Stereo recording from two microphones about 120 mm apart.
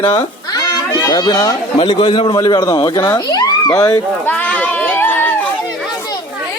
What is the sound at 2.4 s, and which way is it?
Speech, 35° left (ahead or behind).